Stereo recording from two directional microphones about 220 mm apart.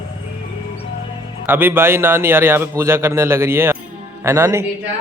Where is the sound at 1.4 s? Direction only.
10° right (ahead or behind).